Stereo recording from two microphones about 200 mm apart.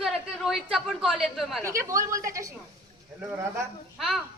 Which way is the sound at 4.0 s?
Centre (ahead or behind).